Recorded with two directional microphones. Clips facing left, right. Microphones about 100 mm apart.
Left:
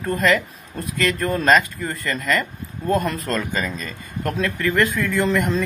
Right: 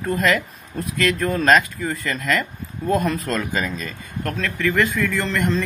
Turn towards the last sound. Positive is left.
turn(degrees=5)  # may be behind; listen again after turning